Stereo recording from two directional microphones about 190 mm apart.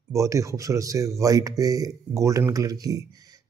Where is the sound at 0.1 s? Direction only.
15° right (ahead or behind).